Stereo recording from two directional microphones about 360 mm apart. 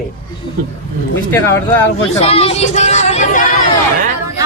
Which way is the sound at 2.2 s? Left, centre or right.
Centre.